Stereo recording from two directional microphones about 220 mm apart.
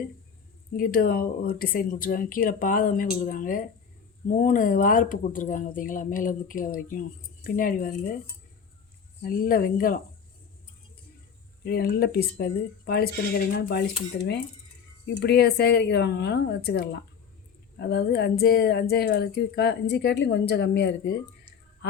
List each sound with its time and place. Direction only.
0.8 s speech: 40° left (ahead or behind)
9.2 s speech: 40° left (ahead or behind)
11.6 s speech: 45° left (ahead or behind)